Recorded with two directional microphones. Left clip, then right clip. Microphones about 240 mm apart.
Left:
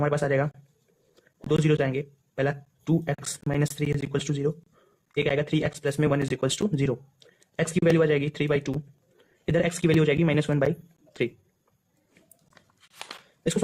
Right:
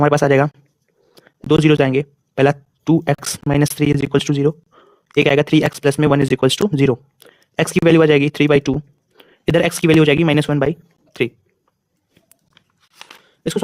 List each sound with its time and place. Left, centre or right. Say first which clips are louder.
0.0 s speech: right 11 dB; right